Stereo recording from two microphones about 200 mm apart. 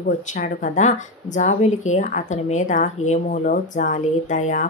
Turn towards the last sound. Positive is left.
turn(degrees=40)  # may be behind; listen again after turning